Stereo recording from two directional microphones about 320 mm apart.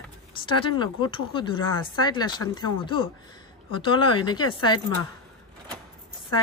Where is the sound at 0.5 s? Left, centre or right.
Centre.